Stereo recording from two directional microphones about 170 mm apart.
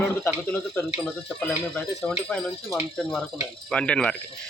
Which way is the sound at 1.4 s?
5° left (ahead or behind).